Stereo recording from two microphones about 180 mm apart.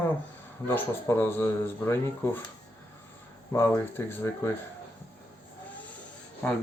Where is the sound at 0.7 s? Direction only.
15° left (ahead or behind).